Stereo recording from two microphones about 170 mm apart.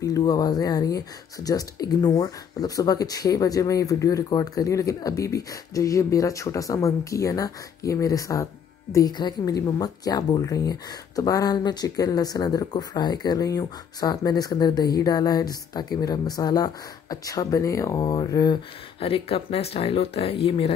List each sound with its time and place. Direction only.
0.0 s a woman's voice: 20° left (ahead or behind)